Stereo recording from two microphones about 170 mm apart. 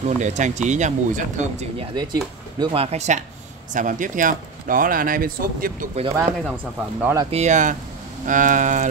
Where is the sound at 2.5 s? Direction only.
35° right (ahead or behind); by 5.9 s 55° right (ahead or behind).